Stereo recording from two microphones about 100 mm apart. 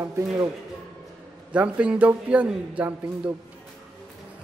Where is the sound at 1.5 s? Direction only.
15° right (ahead or behind).